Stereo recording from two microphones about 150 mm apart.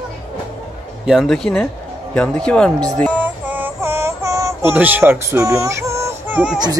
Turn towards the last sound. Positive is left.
turn(degrees=-10)  # may be behind; listen again after turning